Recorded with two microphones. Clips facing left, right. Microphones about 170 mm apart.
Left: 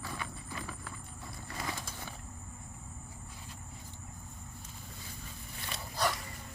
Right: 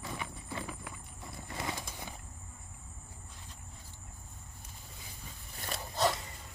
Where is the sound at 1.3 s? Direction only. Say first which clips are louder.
Right 2 dB; 20° right (ahead or behind).